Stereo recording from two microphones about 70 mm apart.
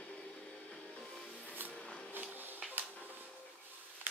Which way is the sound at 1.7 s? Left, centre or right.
Centre.